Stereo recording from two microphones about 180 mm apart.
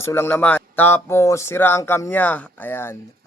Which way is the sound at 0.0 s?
10° left (ahead or behind).